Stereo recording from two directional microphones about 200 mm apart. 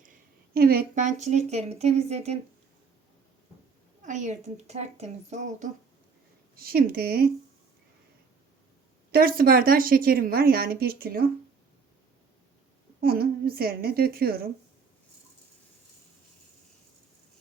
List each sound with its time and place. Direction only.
0.5 s a woman's voice: 50° right (ahead or behind); by 2.4 s 35° right (ahead or behind)
4.0 s a woman's voice: 40° right (ahead or behind)
6.6 s speech: 50° right (ahead or behind)
9.1 s speech: 45° right (ahead or behind)
13.0 s speech: 50° right (ahead or behind)